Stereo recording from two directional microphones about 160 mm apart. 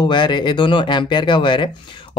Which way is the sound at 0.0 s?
30° left (ahead or behind).